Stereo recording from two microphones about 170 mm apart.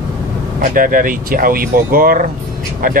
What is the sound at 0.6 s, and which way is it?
Speech, 55° right (ahead or behind).